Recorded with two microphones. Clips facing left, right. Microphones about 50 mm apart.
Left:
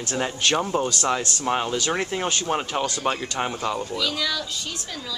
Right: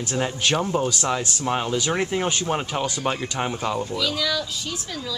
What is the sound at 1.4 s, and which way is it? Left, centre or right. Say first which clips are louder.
A woman's voice: even; centre.